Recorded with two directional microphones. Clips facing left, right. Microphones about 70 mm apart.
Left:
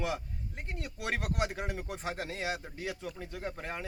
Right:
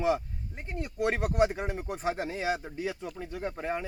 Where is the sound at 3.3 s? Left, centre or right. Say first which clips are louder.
Right 8 dB; centre.